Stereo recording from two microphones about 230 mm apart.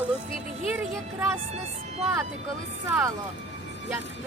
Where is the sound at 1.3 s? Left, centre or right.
Right.